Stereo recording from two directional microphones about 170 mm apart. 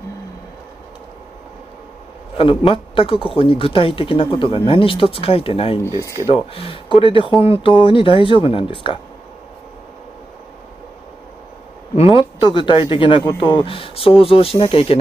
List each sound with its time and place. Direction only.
2.3 s speech: 30° left (ahead or behind)
11.9 s speech: 35° left (ahead or behind)